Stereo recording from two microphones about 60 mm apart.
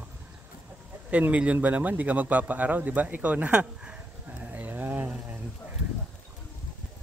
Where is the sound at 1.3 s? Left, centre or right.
Right.